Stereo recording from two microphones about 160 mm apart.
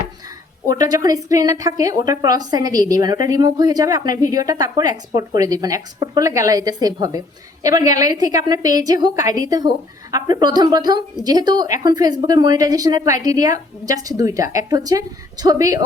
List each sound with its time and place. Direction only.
0.7 s a woman's voice: 20° right (ahead or behind)